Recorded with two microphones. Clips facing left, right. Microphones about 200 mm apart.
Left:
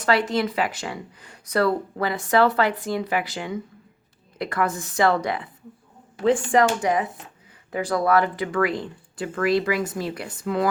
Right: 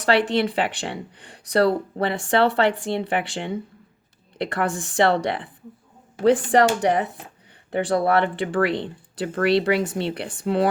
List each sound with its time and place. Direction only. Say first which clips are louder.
0.3 s speech: right 2 dB; 30° right (ahead or behind)